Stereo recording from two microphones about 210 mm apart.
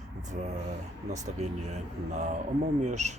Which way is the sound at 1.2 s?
35° right (ahead or behind).